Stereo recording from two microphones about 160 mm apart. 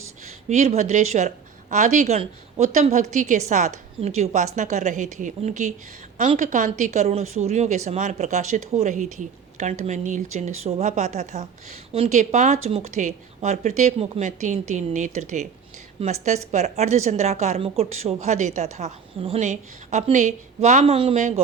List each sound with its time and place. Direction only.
0.4 s a woman's voice: 45° right (ahead or behind)
21.2 s a woman's voice: 50° right (ahead or behind)